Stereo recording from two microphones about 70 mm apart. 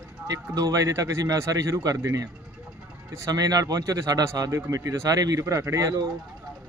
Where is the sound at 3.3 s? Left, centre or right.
Right.